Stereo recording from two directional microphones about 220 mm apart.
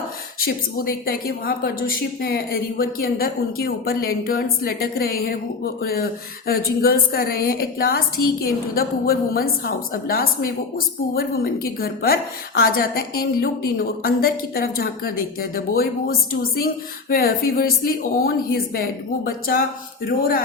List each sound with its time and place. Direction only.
0.3 s a woman's voice: 40° left (ahead or behind)